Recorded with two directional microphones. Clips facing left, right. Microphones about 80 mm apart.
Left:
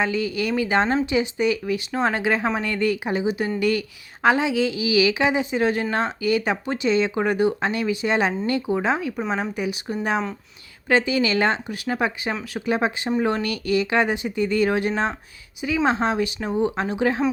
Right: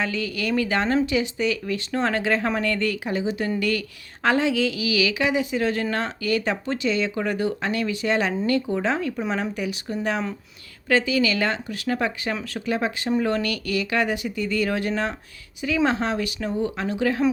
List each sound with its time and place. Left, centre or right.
0.0 s a woman's voice: left